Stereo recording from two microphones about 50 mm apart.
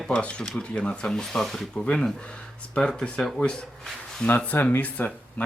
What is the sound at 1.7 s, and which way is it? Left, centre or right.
Speech, left.